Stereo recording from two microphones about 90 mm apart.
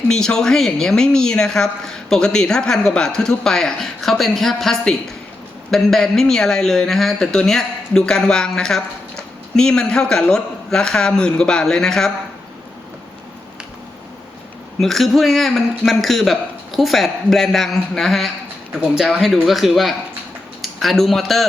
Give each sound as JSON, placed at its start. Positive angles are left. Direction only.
{"t": 0.1, "sound": "speech", "side_deg": 5}
{"t": 14.8, "sound": "a man's voice", "side_deg": 0}